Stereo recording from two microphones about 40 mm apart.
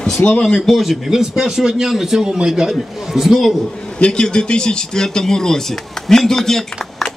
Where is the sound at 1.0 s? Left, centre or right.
Centre.